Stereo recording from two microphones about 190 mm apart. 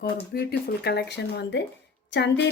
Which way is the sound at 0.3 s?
55° left (ahead or behind).